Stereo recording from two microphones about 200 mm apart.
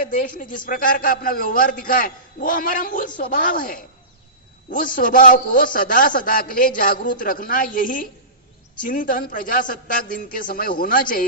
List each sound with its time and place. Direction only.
0.0 s a man's voice: 45° left (ahead or behind)